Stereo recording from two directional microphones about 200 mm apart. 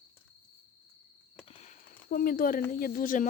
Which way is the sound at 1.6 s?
40° left (ahead or behind).